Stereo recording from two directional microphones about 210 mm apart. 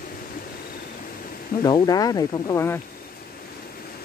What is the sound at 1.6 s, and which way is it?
Speech, 20° left (ahead or behind).